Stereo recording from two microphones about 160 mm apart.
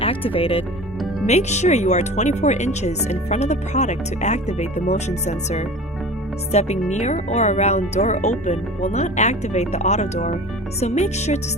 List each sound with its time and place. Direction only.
0.0 s speech: 35° left (ahead or behind)